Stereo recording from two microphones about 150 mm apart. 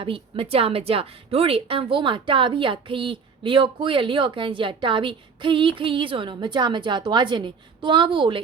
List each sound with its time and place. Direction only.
0.0 s a woman's voice: 35° right (ahead or behind)